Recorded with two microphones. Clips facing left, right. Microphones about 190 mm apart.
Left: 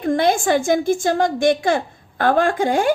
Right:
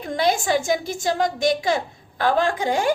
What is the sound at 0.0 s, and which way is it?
A woman's voice, 55° left (ahead or behind).